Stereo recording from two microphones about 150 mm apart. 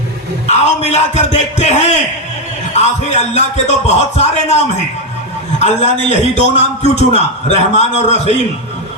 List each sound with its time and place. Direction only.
0.4 s a man's voice: 50° left (ahead or behind)
5.5 s a man's voice: 45° left (ahead or behind)